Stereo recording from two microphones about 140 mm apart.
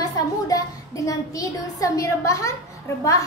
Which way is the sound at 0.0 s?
25° left (ahead or behind).